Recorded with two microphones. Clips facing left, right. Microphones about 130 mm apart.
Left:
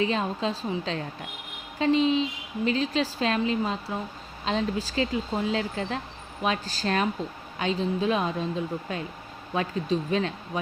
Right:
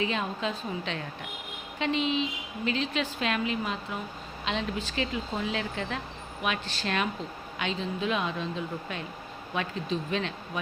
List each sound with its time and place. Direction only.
0.0 s speech: 35° left (ahead or behind)
9.6 s speech: 35° left (ahead or behind)